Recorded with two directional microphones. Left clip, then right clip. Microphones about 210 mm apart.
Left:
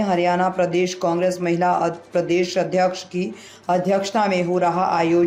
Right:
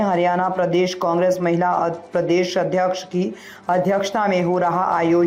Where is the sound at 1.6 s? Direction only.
5° right (ahead or behind).